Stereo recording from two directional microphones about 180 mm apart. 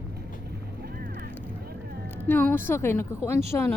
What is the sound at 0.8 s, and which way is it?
Vehicle, 55° right (ahead or behind).